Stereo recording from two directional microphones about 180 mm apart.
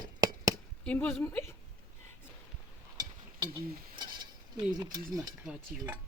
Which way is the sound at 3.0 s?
25° right (ahead or behind).